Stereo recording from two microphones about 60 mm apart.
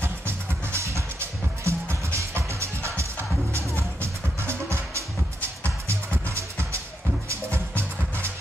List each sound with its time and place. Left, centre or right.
0.0 s music: right